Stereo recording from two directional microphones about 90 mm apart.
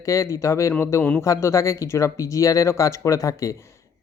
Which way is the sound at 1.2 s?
35° left (ahead or behind).